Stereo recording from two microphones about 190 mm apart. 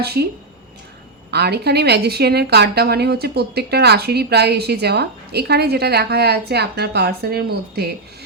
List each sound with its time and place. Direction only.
0.0 s a woman's voice: 55° right (ahead or behind)
1.3 s a woman's voice: 60° right (ahead or behind)